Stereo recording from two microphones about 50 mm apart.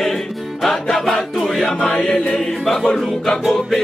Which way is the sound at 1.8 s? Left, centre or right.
Centre.